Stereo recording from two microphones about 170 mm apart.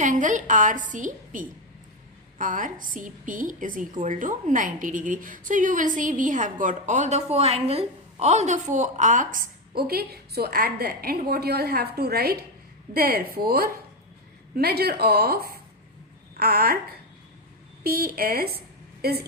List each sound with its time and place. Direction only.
0.0 s a woman's voice: 50° right (ahead or behind)
17.8 s a woman's voice: 60° right (ahead or behind)